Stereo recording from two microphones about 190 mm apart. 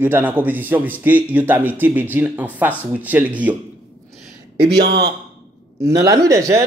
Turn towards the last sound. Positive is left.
turn(degrees=-15)  # may be behind; listen again after turning